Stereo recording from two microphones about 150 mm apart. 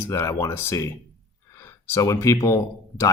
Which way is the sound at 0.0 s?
20° left (ahead or behind).